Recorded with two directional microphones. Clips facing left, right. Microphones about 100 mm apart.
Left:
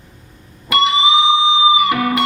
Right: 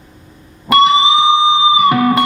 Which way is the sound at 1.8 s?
35° right (ahead or behind).